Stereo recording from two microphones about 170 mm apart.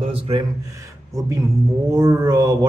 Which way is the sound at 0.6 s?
20° right (ahead or behind).